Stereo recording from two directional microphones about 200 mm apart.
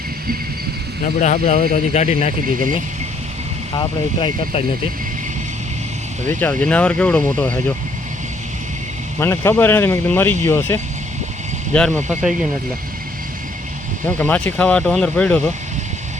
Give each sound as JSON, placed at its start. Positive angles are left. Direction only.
{"t": 1.2, "sound": "speech", "side_deg": 40}
{"t": 3.8, "sound": "speech", "side_deg": 25}
{"t": 6.2, "sound": "speech", "side_deg": 10}
{"t": 9.2, "sound": "speech", "side_deg": 15}
{"t": 14.2, "sound": "speech", "side_deg": 5}